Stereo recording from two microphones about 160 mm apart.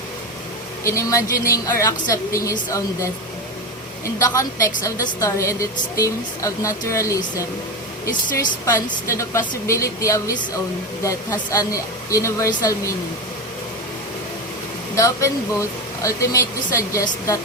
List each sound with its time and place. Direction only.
0.9 s a woman's voice: 20° left (ahead or behind)
8.6 s a woman's voice: 20° left (ahead or behind)
14.9 s a woman's voice: 20° left (ahead or behind)